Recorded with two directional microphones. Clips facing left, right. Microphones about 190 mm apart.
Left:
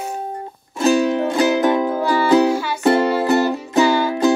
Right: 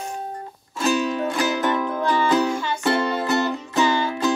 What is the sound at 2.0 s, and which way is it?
Music, 10° left (ahead or behind).